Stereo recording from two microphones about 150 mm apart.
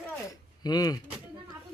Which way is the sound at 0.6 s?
25° left (ahead or behind).